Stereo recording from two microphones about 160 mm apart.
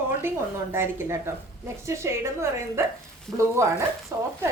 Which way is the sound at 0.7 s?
15° right (ahead or behind).